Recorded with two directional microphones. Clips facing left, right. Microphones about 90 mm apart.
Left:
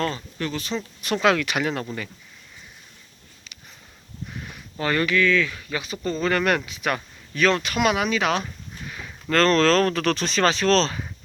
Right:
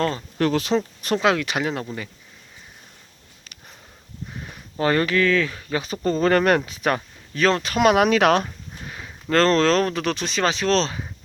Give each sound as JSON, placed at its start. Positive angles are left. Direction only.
{"t": 0.3, "sound": "speech", "side_deg": -85}
{"t": 0.8, "sound": "speech", "side_deg": -35}
{"t": 1.2, "sound": "speech", "side_deg": -25}
{"t": 4.3, "sound": "speech", "side_deg": -25}
{"t": 7.9, "sound": "speech", "side_deg": -60}
{"t": 8.8, "sound": "a sound", "side_deg": -30}
{"t": 9.3, "sound": "speech", "side_deg": -25}